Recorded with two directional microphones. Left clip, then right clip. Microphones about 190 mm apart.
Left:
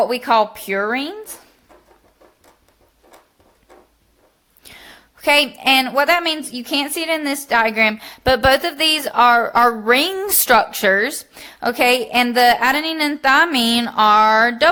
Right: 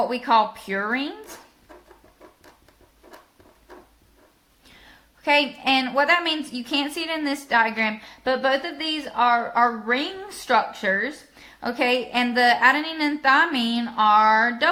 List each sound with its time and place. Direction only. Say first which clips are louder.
0.0 s speech: left 4 dB; 40° left (ahead or behind)
4.6 s a woman's voice: left 9 dB; 45° left (ahead or behind)